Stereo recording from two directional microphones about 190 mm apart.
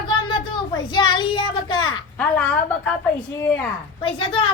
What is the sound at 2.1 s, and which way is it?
A woman's voice, 5° left (ahead or behind).